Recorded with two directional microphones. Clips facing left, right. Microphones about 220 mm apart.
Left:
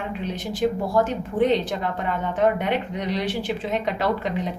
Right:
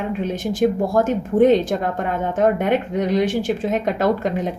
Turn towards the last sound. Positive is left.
turn(degrees=-45)  # may be behind; listen again after turning